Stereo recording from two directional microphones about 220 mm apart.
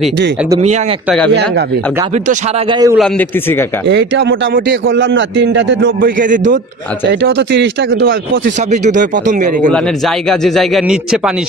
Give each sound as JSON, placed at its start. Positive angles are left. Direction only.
{"t": 2.7, "sound": "a man's voice", "side_deg": -15}
{"t": 3.9, "sound": "a man's voice", "side_deg": -55}
{"t": 5.9, "sound": "speech", "side_deg": -40}
{"t": 7.1, "sound": "speech", "side_deg": -55}
{"t": 8.8, "sound": "speech", "side_deg": -35}
{"t": 9.7, "sound": "a man's voice", "side_deg": 0}